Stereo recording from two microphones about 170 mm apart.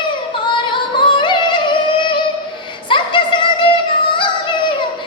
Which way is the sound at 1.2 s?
30° left (ahead or behind).